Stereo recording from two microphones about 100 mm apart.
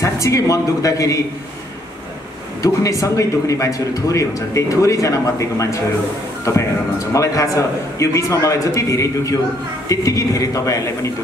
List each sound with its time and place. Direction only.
0.0 s speech: 30° left (ahead or behind)
2.6 s speech: 35° left (ahead or behind)